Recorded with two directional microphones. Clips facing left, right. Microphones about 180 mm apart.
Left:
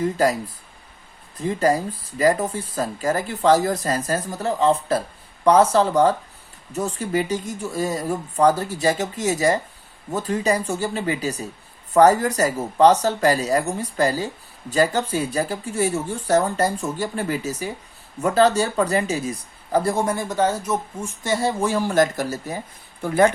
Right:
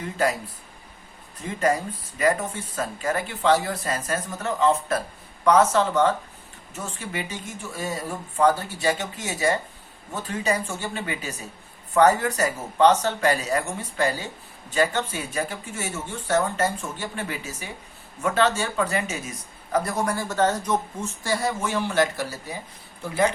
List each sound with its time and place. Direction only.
0.0 s speech: 40° left (ahead or behind)
1.4 s speech: 35° left (ahead or behind); by 21.1 s 10° left (ahead or behind)
21.2 s speech: 25° left (ahead or behind); by 23.3 s 50° left (ahead or behind)